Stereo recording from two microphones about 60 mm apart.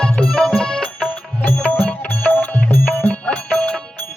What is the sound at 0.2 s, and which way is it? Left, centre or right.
Music, centre.